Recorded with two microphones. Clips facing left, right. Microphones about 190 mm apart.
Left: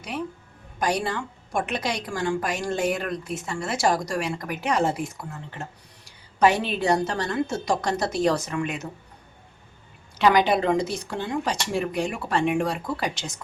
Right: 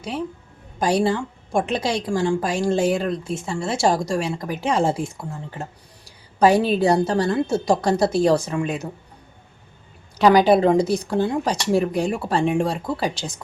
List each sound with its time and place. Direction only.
0.8 s a woman's voice: 30° right (ahead or behind)
10.2 s speech: 35° right (ahead or behind)